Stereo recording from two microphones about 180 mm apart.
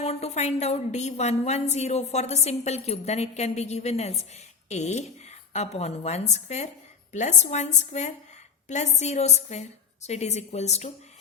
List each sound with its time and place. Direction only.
0.0 s a woman's voice: 35° left (ahead or behind)